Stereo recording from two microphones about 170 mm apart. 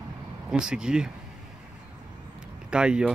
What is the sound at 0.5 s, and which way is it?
Speech, 5° right (ahead or behind).